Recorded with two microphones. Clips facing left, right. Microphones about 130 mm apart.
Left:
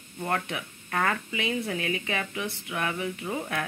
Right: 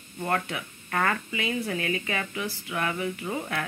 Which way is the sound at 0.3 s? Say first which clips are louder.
Right 1 dB; 15° left (ahead or behind).